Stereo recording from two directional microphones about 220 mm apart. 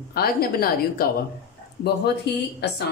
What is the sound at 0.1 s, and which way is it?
Speech, 45° left (ahead or behind).